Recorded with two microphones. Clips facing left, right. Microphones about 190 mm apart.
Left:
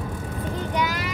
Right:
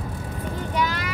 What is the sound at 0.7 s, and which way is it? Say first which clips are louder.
Speech: right 1 dB; 15° left (ahead or behind).